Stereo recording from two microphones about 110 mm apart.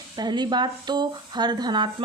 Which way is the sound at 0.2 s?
40° right (ahead or behind).